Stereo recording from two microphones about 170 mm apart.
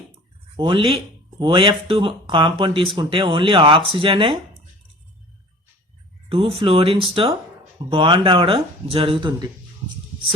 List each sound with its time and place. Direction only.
0.5 s speech: 30° right (ahead or behind)
6.2 s speech: 35° right (ahead or behind)